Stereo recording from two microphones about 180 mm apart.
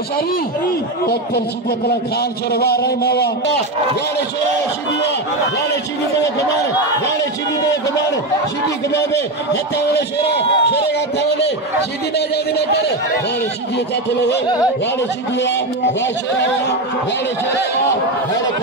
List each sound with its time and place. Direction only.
2.5 s a sound: 60° left (ahead or behind)
9.5 s a man's voice: 65° left (ahead or behind)
15.3 s a man's voice: 80° left